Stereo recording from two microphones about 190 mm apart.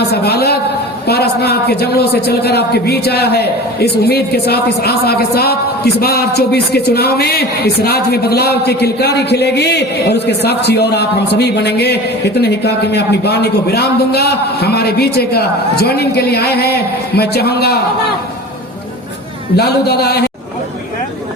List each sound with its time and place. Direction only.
0.0 s a man's voice: 60° left (ahead or behind)
19.5 s a man's voice: 55° left (ahead or behind)